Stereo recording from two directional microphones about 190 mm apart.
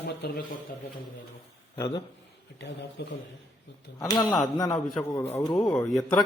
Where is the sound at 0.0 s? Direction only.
60° left (ahead or behind).